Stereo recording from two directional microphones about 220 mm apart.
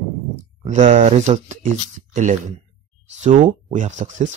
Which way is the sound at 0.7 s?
35° right (ahead or behind).